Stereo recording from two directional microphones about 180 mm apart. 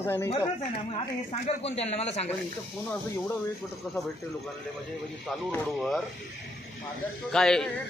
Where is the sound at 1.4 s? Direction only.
35° left (ahead or behind).